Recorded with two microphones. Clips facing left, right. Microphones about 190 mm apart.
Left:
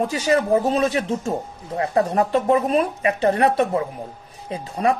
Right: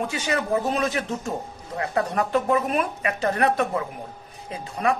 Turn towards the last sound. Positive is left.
turn(degrees=30)  # may be behind; listen again after turning